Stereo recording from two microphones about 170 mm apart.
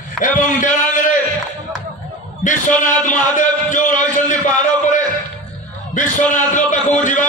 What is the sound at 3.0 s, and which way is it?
A man's voice, 50° left (ahead or behind).